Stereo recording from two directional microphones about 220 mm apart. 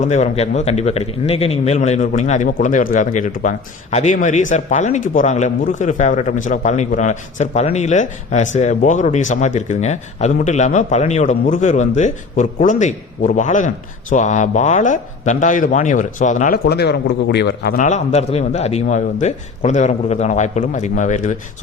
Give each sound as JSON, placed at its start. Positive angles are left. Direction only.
{"t": 0.0, "sound": "a man's voice", "side_deg": 30}
{"t": 16.6, "sound": "a man's voice", "side_deg": 45}